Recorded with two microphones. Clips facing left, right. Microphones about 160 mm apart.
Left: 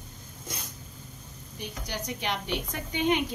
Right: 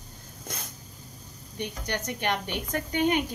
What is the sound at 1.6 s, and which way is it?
Speech, 60° right (ahead or behind).